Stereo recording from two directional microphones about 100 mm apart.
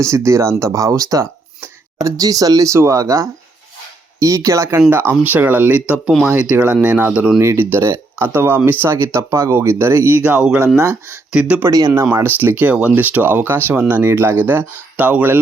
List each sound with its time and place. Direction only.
0.0 s speech: 30° right (ahead or behind)
4.9 s speech: 20° right (ahead or behind)
7.3 s speech: 25° right (ahead or behind)
11.3 s speech: 10° right (ahead or behind)
11.7 s speech: 35° right (ahead or behind)
12.0 s speech: 20° right (ahead or behind)